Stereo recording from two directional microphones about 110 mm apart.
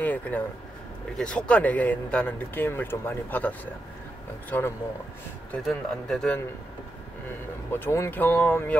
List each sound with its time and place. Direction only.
0.0 s a sound: 15° left (ahead or behind)
1.1 s speech: 10° left (ahead or behind)
5.7 s speech: 5° left (ahead or behind)
7.7 s speech: 25° left (ahead or behind)